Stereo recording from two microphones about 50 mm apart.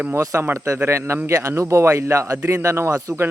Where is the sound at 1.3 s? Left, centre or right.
Right.